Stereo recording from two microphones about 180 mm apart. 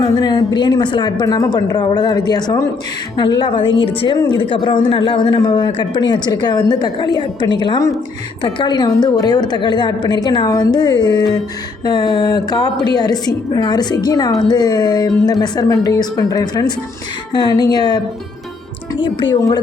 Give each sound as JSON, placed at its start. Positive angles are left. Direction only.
{"t": 0.0, "sound": "a woman's voice", "side_deg": 25}